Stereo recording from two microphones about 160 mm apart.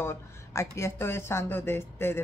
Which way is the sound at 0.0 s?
15° left (ahead or behind).